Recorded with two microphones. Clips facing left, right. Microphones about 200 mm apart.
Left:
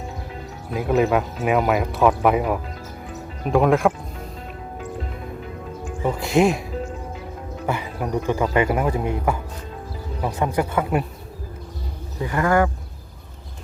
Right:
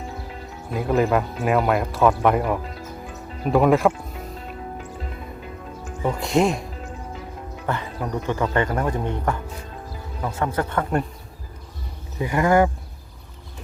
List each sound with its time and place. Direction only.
0.7 s speech: centre (ahead or behind)
6.0 s speech: centre (ahead or behind)
7.7 s speech: 10° left (ahead or behind)
12.2 s speech: 15° right (ahead or behind)